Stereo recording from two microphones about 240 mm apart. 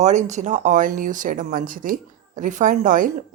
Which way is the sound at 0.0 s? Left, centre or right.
Right.